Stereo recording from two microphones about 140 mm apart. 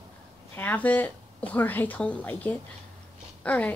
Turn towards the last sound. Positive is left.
turn(degrees=10)  # may be behind; listen again after turning